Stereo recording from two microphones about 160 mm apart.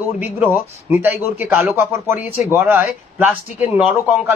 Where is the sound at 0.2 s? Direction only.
15° right (ahead or behind).